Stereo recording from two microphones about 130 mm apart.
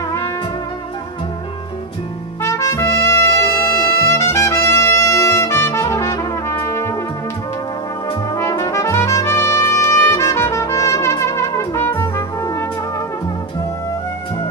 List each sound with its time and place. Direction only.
2.4 s trumpet: 20° left (ahead or behind)
8.4 s trumpet: 20° left (ahead or behind)